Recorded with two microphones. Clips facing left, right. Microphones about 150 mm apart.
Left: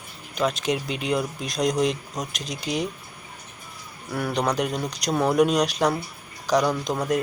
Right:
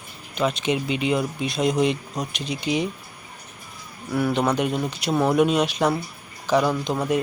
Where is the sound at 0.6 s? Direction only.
Centre (ahead or behind).